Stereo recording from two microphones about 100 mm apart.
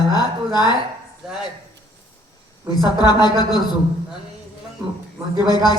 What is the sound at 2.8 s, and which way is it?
Speech, 45° left (ahead or behind).